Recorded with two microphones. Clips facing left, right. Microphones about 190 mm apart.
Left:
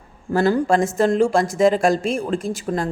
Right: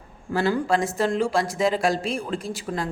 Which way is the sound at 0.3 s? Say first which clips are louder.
Left 5 dB; 40° left (ahead or behind).